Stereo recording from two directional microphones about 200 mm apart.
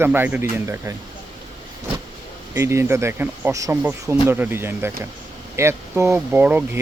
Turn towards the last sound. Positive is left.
turn(degrees=-10)  # may be behind; listen again after turning